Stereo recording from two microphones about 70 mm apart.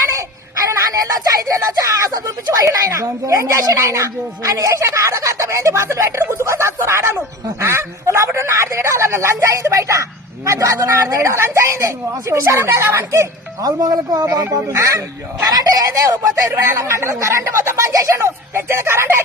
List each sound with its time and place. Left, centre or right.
0.0 s baby cry: right
0.7 s speech: right
15.4 s speech: right
16.7 s speech: right